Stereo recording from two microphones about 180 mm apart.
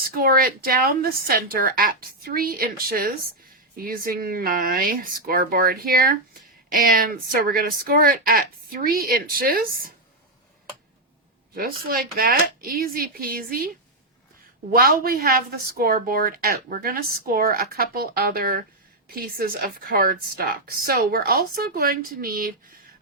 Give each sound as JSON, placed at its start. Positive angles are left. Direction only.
{"t": 0.0, "sound": "a woman's voice", "side_deg": -55}
{"t": 11.5, "sound": "a woman's voice", "side_deg": -55}
{"t": 14.7, "sound": "a woman's voice", "side_deg": -55}